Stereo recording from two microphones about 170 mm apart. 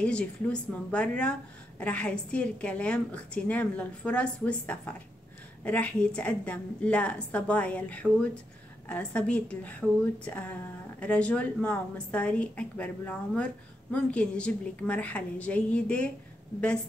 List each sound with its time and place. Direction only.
0.0 s a woman's voice: 5° left (ahead or behind)